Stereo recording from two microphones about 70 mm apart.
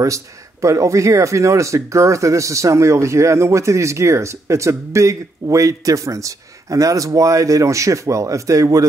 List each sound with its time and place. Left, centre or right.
0.0 s speech: right